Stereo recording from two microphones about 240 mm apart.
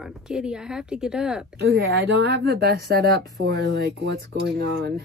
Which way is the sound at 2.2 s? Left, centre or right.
Right.